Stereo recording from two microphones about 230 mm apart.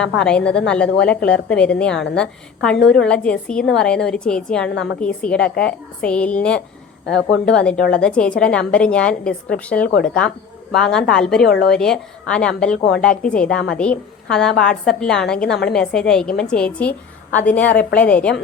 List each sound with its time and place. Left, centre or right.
0.0 s a woman's voice: centre
11.4 s a woman's voice: left
11.7 s a woman's voice: centre